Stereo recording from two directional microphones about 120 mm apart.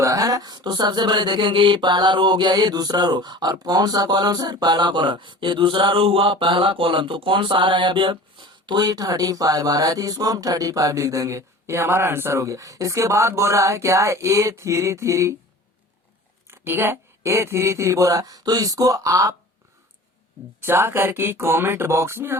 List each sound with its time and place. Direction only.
0.0 s a sound: 30° right (ahead or behind)
16.5 s speech: 20° right (ahead or behind)
20.6 s speech: 20° right (ahead or behind)